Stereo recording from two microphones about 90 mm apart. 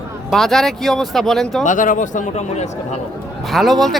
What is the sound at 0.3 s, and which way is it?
Speech, 5° left (ahead or behind).